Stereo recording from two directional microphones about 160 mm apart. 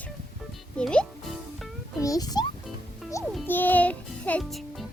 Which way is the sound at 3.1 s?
10° left (ahead or behind).